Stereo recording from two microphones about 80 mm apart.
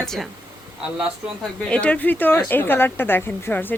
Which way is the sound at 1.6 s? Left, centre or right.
Centre.